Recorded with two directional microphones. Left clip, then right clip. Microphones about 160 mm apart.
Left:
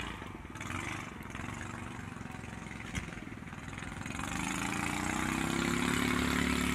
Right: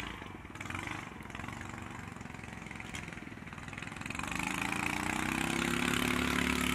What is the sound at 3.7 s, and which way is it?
Vehicle, 35° right (ahead or behind).